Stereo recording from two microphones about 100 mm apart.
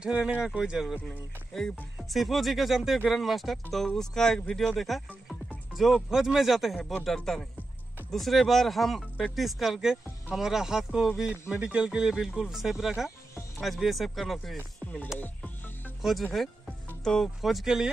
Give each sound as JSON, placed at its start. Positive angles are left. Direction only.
{"t": 0.0, "sound": "speech", "side_deg": -10}
{"t": 1.0, "sound": "speech", "side_deg": 5}
{"t": 15.1, "sound": "music", "side_deg": 20}
{"t": 16.0, "sound": "speech", "side_deg": 0}